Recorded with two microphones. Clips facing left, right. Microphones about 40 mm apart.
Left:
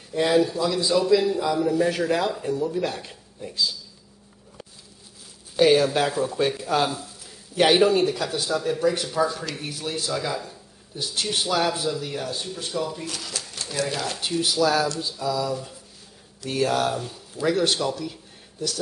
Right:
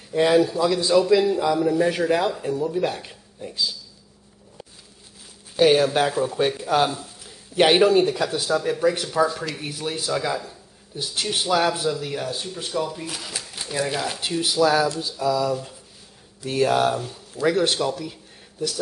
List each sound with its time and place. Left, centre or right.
0.1 s speech: centre
6.1 s a man's voice: centre
7.8 s speech: centre